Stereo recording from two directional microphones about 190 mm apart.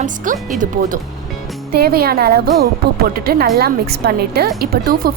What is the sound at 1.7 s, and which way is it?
A woman's voice, 55° right (ahead or behind).